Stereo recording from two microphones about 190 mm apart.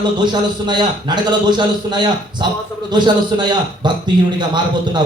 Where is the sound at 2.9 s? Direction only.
25° right (ahead or behind).